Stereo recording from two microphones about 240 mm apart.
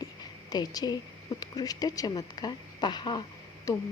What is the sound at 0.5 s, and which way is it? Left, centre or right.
A woman's voice, centre.